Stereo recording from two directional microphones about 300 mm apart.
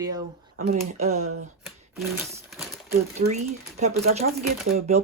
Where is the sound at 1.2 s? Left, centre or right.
Right.